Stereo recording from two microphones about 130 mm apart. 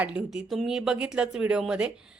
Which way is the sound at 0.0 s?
10° right (ahead or behind).